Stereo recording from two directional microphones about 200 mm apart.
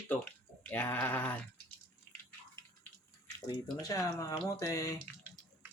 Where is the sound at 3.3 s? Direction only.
20° left (ahead or behind).